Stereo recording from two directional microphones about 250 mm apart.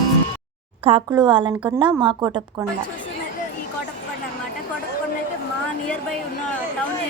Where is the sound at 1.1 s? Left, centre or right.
Centre.